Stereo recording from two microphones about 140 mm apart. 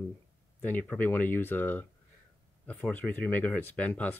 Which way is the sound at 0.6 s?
10° left (ahead or behind).